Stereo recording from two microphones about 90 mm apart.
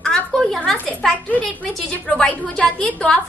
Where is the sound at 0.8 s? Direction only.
15° left (ahead or behind).